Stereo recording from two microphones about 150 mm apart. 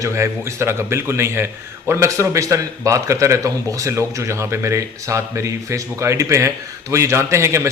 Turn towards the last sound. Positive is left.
turn(degrees=-20)  # may be behind; listen again after turning